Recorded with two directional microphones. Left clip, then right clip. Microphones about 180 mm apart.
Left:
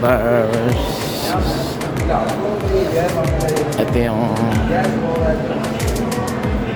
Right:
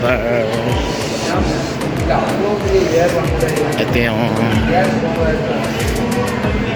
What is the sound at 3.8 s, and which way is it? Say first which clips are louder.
Speech: right 2 dB; 15° left (ahead or behind).